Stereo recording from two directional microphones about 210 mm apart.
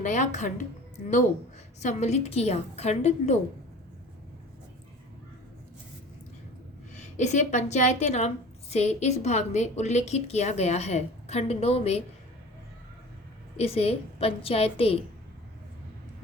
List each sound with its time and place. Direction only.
0.0 s a woman's voice: 35° left (ahead or behind)
1.8 s a woman's voice: 35° left (ahead or behind)
6.9 s a woman's voice: 35° left (ahead or behind)
13.6 s a woman's voice: 30° left (ahead or behind)